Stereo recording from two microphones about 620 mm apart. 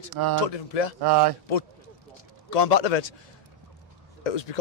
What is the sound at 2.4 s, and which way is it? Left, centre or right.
Speech, left.